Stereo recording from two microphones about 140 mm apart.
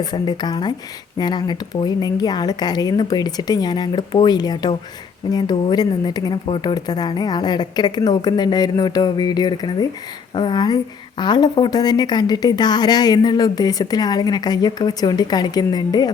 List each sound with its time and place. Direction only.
0.0 s speech: 30° left (ahead or behind)